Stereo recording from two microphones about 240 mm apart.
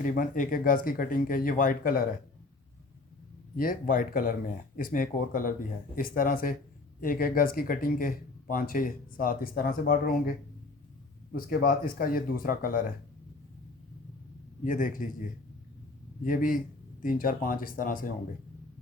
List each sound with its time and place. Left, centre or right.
0.0 s speech: left
3.6 s speech: left
11.3 s speech: left
14.6 s speech: left
16.2 s speech: left